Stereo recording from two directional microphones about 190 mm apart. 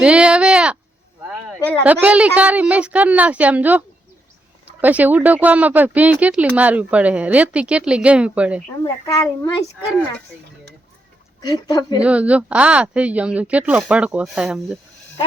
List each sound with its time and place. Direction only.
0.0 s speech: 5° right (ahead or behind)
1.8 s speech: 10° right (ahead or behind)
8.8 s a child's voice: 15° left (ahead or behind)
11.3 s speech: 20° left (ahead or behind)
12.0 s speech: 5° right (ahead or behind)